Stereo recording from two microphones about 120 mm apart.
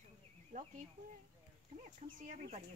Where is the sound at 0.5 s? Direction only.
90° right.